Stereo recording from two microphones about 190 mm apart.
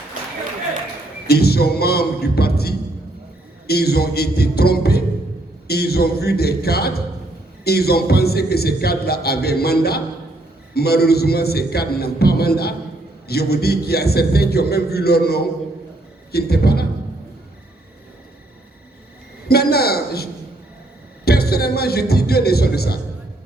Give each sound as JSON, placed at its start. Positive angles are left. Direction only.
{"t": 1.3, "sound": "a man's voice", "side_deg": 55}
{"t": 19.5, "sound": "a man's voice", "side_deg": 55}
{"t": 21.2, "sound": "a man's voice", "side_deg": 55}